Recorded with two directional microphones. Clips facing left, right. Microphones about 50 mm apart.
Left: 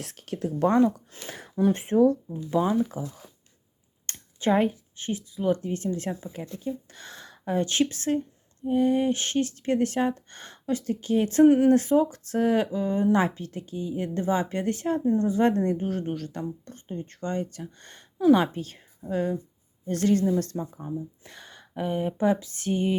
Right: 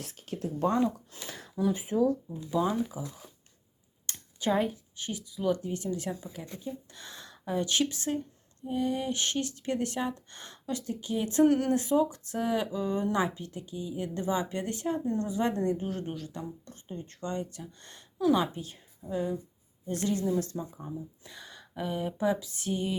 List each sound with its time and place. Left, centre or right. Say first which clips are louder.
0.0 s speech: left 4 dB; left
0.7 s a woman's voice: left 7 dB; left
1.7 s speech: left 7 dB; left
2.6 s speech: left 4 dB; left
3.0 s a woman's voice: left 4 dB; left
4.1 s a sound: left 5 dB; left
5.4 s a woman's voice: left 3 dB; left
11.4 s speech: left 8 dB; centre
11.7 s speech: left 5 dB; left
16.1 s speech: left 6 dB; left
18.3 s a woman's voice: left 4 dB; left
20.5 s speech: left 4 dB; left
21.2 s a sound: left 1 dB; left